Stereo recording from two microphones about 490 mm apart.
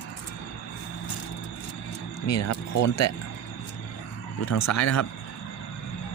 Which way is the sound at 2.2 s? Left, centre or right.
Left.